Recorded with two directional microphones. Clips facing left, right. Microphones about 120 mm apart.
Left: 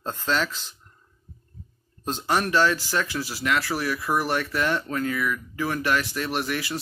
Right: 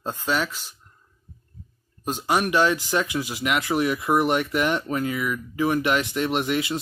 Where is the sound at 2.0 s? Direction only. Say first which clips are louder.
Right 2 dB; 10° right (ahead or behind).